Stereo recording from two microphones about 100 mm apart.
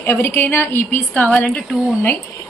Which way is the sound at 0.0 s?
20° left (ahead or behind).